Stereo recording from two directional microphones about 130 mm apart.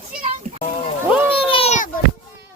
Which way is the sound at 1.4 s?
45° left (ahead or behind).